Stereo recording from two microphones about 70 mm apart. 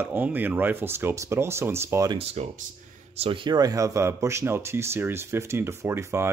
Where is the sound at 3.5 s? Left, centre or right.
Right.